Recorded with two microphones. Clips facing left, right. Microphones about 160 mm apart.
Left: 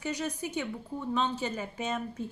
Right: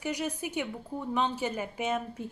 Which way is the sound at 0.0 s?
15° right (ahead or behind).